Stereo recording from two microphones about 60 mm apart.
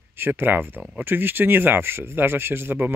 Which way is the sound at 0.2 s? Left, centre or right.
Right.